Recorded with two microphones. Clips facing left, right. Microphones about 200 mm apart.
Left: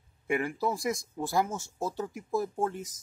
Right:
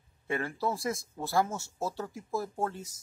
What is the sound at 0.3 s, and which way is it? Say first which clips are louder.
Speech: left 3 dB; 15° left (ahead or behind).